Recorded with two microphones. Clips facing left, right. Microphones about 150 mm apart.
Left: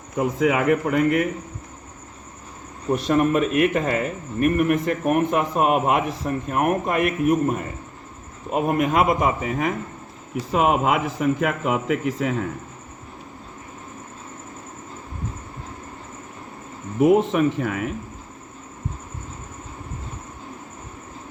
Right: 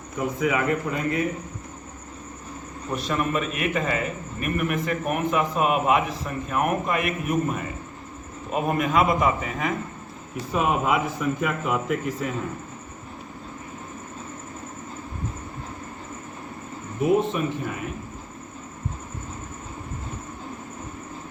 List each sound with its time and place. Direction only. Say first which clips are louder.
0.3 s a man's voice: left 4 dB; 75° left (ahead or behind)
2.9 s a man's voice: left 6 dB; 50° left (ahead or behind)
8.8 s a man's voice: left 1 dB; 45° left (ahead or behind)
10.5 s a man's voice: left 3 dB; 75° left (ahead or behind)
17.0 s a man's voice: left 5 dB; 75° left (ahead or behind)